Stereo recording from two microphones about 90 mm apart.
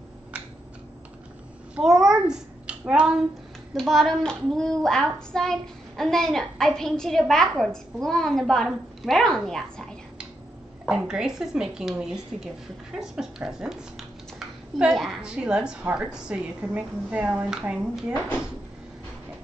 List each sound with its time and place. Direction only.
1.8 s a child's voice: 5° right (ahead or behind)
3.7 s speech: 5° left (ahead or behind)
10.9 s a woman's voice: 10° right (ahead or behind)